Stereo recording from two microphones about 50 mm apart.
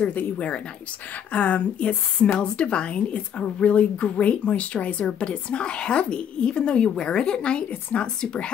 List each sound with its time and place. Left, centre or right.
0.0 s speech: left
7.7 s speech: left
8.2 s speech: centre